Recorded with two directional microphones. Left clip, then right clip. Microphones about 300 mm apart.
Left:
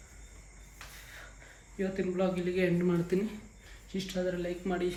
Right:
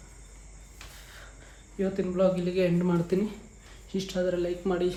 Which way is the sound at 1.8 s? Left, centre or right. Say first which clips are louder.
Right 6 dB; centre.